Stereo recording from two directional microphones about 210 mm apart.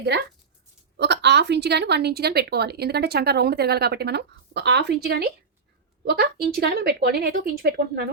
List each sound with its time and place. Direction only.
0.1 s a woman's voice: 50° right (ahead or behind)